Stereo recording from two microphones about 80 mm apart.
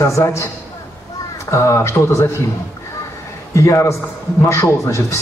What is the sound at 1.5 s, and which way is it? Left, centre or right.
Speech, left.